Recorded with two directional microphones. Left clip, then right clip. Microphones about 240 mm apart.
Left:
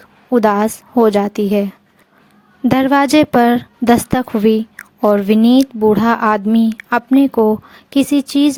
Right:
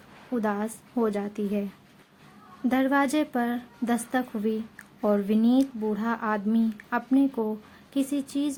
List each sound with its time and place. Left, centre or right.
0.3 s a woman's voice: left
2.6 s a woman's voice: left